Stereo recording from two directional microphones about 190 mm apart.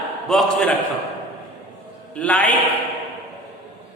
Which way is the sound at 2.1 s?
5° left (ahead or behind).